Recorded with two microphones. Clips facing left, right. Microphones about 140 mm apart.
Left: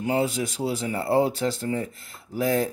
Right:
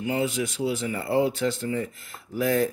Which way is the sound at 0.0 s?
40° left (ahead or behind).